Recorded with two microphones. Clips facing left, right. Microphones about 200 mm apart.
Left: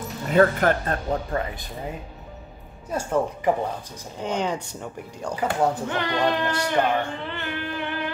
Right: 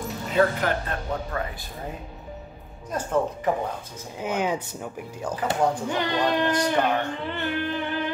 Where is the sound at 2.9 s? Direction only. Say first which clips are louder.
Left 1 dB; 10° left (ahead or behind).